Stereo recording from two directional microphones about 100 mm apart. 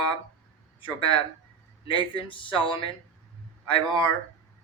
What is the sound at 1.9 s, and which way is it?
Speech, 55° left (ahead or behind).